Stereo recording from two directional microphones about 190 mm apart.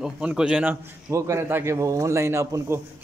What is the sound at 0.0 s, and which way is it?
Speech, 5° right (ahead or behind).